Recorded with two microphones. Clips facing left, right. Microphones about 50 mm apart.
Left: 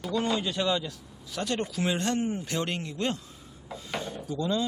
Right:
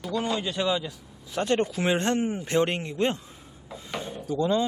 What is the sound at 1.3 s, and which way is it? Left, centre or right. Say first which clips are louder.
Speech: right 6 dB; right.